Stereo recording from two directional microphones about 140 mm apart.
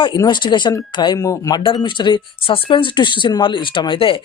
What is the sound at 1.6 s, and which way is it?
Speech, 35° left (ahead or behind).